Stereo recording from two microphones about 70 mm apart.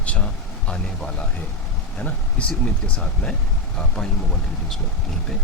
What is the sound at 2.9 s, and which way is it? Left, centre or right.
Speech, centre.